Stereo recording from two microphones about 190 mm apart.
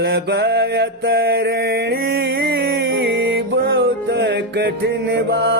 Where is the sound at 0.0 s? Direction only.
60° right (ahead or behind).